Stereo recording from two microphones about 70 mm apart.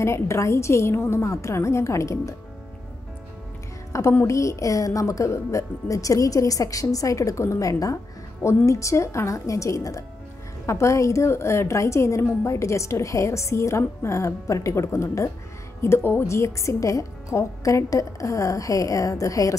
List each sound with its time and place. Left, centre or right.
0.0 s a woman's voice: left
3.9 s a woman's voice: left